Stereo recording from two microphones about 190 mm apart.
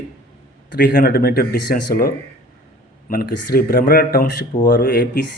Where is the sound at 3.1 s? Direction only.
50° left (ahead or behind).